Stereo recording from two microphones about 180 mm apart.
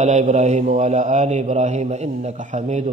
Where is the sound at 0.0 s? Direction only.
40° right (ahead or behind).